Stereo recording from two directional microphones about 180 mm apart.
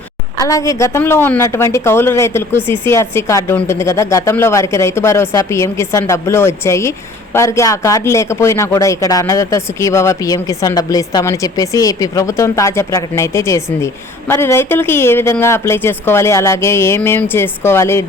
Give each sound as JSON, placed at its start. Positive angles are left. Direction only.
{"t": 0.3, "sound": "a woman's voice", "side_deg": 20}